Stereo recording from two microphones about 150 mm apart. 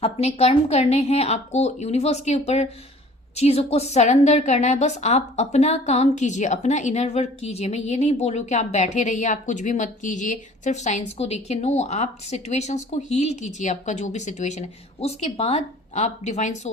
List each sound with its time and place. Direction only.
0.0 s a woman's voice: 45° left (ahead or behind)